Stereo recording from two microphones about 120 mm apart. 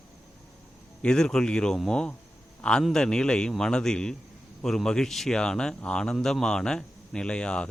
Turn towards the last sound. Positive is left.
turn(degrees=5)  # may be behind; listen again after turning